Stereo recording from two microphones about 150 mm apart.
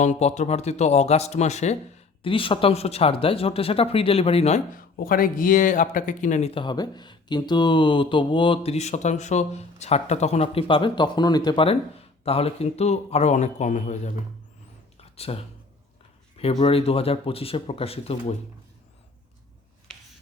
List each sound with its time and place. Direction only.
0.0 s speech: 50° left (ahead or behind)
2.2 s speech: 35° left (ahead or behind)
4.8 s speech: 75° left (ahead or behind); by 6.5 s 55° left (ahead or behind)
6.5 s speech: 30° left (ahead or behind); by 14.1 s 50° left (ahead or behind)
14.9 s a sound: 40° left (ahead or behind)
16.4 s speech: 45° left (ahead or behind)